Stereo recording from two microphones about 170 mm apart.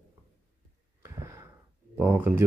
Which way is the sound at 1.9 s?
10° right (ahead or behind).